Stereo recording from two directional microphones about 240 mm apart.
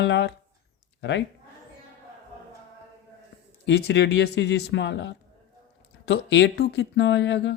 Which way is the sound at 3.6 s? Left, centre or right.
Left.